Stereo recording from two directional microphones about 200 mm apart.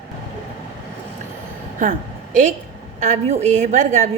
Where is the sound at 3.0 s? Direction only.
35° right (ahead or behind).